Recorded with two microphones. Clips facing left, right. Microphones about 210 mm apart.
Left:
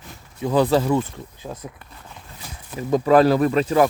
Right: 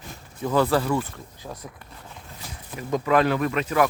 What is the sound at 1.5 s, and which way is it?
Speech, 10° left (ahead or behind).